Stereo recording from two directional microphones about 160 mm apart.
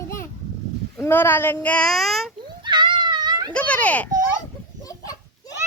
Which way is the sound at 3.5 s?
10° left (ahead or behind).